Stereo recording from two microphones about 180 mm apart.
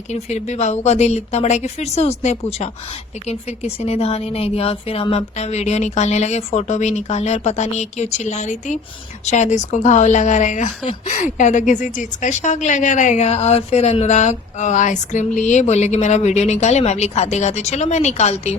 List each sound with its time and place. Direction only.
0.1 s speech: 40° left (ahead or behind)